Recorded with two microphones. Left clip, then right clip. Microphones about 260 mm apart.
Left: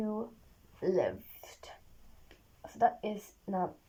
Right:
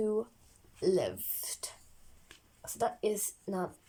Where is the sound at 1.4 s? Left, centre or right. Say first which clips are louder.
Right 6 dB; right.